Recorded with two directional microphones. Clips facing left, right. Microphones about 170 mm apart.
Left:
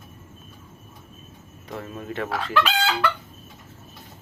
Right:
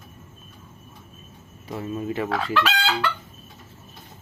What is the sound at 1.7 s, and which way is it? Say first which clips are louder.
Fowl: right 5 dB; 5° right (ahead or behind).